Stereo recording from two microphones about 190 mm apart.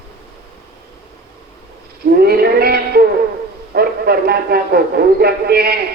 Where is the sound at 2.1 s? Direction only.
55° right (ahead or behind).